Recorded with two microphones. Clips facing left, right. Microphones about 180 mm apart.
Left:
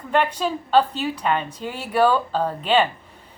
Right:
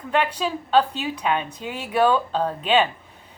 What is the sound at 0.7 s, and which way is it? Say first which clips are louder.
A woman's voice: left 1 dB; 10° right (ahead or behind).